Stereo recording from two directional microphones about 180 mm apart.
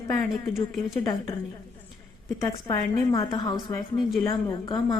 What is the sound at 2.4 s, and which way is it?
A woman's voice, 20° left (ahead or behind).